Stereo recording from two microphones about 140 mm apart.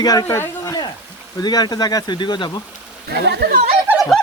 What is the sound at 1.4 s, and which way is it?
Speech, 30° left (ahead or behind).